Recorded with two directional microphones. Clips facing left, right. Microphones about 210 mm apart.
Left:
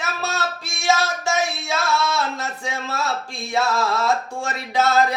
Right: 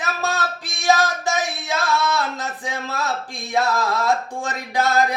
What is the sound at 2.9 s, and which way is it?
Speech, 15° right (ahead or behind).